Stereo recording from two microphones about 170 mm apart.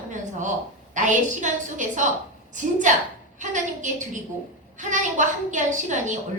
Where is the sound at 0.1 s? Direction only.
45° right (ahead or behind).